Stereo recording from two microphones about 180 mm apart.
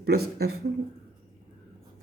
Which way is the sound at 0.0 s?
60° right (ahead or behind).